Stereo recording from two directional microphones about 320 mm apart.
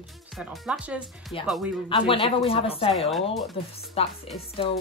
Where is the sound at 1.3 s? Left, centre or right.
Centre.